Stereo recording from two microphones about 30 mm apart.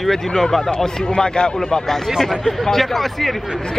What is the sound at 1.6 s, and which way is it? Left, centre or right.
Speech, centre.